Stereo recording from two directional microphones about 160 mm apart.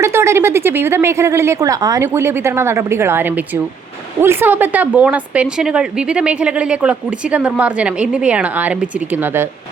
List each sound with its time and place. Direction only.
0.0 s a woman's voice: 15° right (ahead or behind)